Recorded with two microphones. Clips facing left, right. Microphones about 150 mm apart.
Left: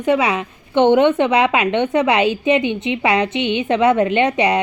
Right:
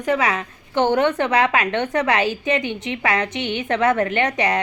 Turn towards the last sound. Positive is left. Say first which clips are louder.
# left 5 dB
turn(degrees=15)  # may be behind; listen again after turning